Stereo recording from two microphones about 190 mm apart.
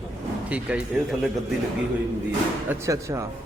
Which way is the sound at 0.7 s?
5° right (ahead or behind).